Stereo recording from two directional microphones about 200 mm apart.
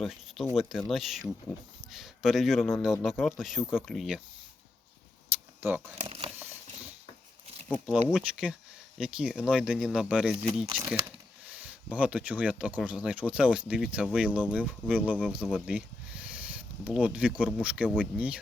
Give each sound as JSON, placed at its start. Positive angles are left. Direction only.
{"t": 0.0, "sound": "speech", "side_deg": 0}
{"t": 5.5, "sound": "speech", "side_deg": -10}
{"t": 6.0, "sound": "speech", "side_deg": -30}
{"t": 6.4, "sound": "mechanisms", "side_deg": -10}
{"t": 7.7, "sound": "speech", "side_deg": 5}
{"t": 11.4, "sound": "speech", "side_deg": -5}